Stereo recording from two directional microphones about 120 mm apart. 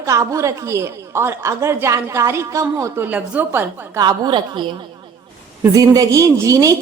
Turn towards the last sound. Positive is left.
turn(degrees=-25)  # may be behind; listen again after turning